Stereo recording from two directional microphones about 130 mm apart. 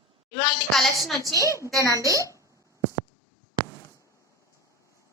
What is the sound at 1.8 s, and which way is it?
Speech, 25° left (ahead or behind).